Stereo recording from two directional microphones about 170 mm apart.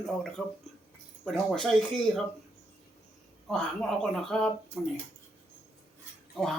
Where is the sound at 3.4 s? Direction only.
Centre (ahead or behind).